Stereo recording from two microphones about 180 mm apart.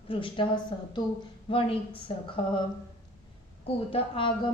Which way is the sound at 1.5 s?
30° left (ahead or behind).